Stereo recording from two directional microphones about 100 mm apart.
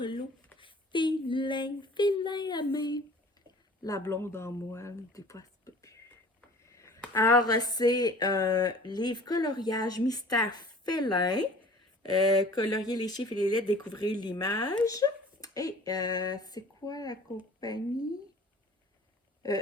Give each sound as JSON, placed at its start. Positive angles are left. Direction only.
{"t": 0.6, "sound": "speech", "side_deg": 55}
{"t": 4.1, "sound": "speech", "side_deg": 25}
{"t": 19.4, "sound": "speech", "side_deg": 40}